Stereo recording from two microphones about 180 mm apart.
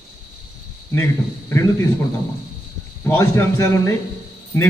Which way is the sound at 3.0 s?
15° left (ahead or behind).